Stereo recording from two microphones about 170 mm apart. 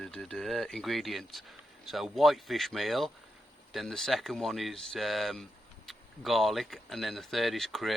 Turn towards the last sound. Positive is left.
turn(degrees=0)  # may be behind; listen again after turning